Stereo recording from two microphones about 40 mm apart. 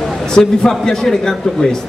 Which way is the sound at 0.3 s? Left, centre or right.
Centre.